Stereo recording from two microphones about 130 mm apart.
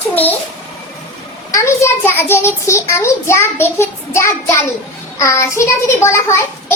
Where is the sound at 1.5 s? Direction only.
20° left (ahead or behind).